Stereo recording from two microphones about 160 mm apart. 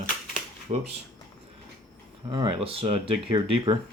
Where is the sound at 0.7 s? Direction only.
40° right (ahead or behind).